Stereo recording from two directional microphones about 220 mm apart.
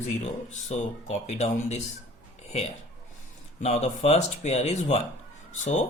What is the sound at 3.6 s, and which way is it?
Speech, 30° left (ahead or behind).